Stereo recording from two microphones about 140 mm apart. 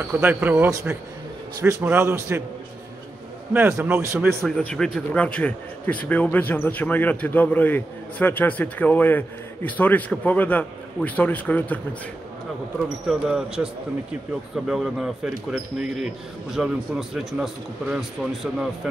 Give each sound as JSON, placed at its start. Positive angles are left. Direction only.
{"t": 0.1, "sound": "a man's voice", "side_deg": -15}
{"t": 3.5, "sound": "speech", "side_deg": -15}
{"t": 4.5, "sound": "a man's voice", "side_deg": 5}
{"t": 12.8, "sound": "speech", "side_deg": -5}